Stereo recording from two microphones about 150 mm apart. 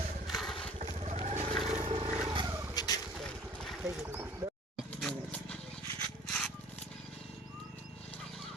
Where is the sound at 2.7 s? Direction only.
25° left (ahead or behind).